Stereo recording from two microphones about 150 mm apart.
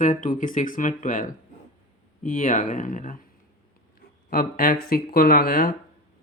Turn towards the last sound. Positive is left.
turn(degrees=75)  # may be behind; listen again after turning